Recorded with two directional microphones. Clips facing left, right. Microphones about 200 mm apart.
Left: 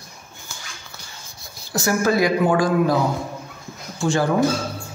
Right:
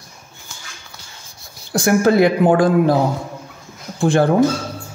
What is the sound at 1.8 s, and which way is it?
Speech, 60° right (ahead or behind).